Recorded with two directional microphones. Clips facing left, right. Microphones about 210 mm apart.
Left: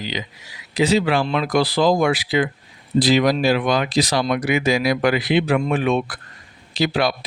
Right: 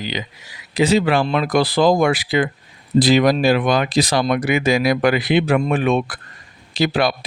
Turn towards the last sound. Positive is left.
turn(degrees=-50)  # may be behind; listen again after turning